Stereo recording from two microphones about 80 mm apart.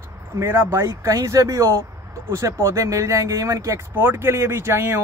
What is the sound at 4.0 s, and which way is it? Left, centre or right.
Speech, right.